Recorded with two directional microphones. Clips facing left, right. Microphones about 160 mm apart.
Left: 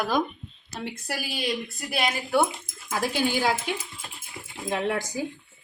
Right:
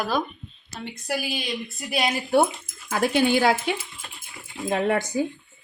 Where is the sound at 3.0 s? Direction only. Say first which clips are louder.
Right 5 dB; 60° right (ahead or behind).